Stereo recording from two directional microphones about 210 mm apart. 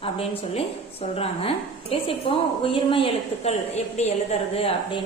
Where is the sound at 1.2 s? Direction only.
25° left (ahead or behind).